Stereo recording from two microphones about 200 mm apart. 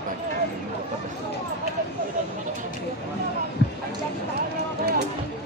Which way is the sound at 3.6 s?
60° left (ahead or behind).